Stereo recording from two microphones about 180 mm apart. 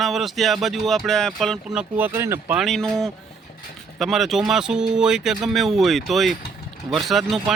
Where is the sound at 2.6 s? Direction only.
Centre (ahead or behind).